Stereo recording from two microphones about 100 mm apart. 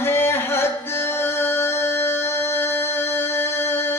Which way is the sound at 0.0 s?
25° left (ahead or behind).